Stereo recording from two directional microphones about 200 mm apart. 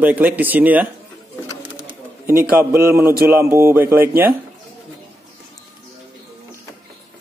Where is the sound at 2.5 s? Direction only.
10° right (ahead or behind).